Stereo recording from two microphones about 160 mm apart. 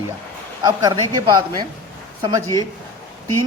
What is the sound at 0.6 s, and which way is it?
Speech, 25° right (ahead or behind).